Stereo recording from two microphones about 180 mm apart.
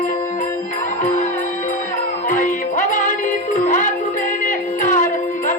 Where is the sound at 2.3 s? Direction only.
45° left (ahead or behind).